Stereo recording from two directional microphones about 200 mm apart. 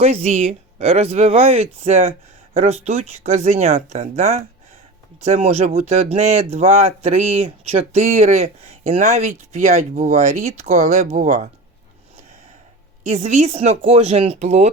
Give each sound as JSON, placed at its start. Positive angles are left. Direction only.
{"t": 0.0, "sound": "speech", "side_deg": -30}
{"t": 13.1, "sound": "speech", "side_deg": -35}